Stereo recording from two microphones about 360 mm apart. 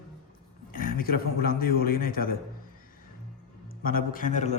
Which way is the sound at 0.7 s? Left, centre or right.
Left.